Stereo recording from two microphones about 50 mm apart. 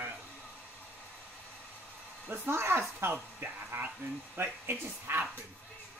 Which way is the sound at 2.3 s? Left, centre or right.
Right.